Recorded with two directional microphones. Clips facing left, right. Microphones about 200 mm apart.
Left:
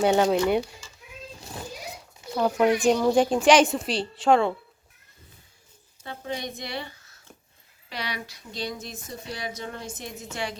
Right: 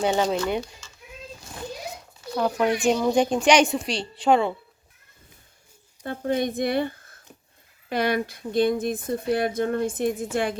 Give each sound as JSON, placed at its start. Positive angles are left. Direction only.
{"t": 0.0, "sound": "speech", "side_deg": 5}
{"t": 2.3, "sound": "a woman's voice", "side_deg": 5}
{"t": 6.1, "sound": "speech", "side_deg": -50}